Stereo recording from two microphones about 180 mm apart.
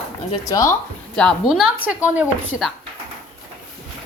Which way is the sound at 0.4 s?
15° left (ahead or behind).